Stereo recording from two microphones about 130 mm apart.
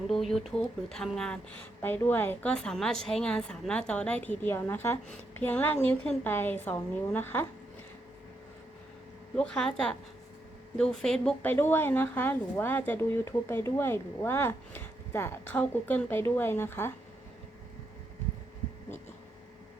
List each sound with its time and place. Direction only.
0.1 s speech: centre (ahead or behind)
9.3 s speech: 5° left (ahead or behind)
11.4 s speech: 15° left (ahead or behind)